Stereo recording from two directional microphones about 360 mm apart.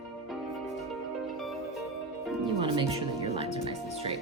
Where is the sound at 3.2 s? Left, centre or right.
Centre.